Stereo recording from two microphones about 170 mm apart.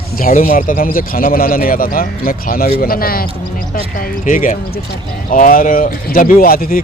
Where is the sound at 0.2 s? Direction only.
55° left (ahead or behind).